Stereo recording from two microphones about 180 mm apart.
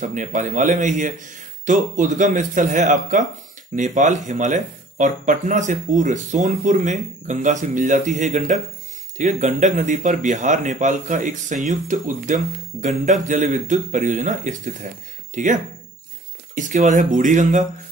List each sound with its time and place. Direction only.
0.0 s speech: 45° right (ahead or behind)
13.0 s speech: 40° right (ahead or behind)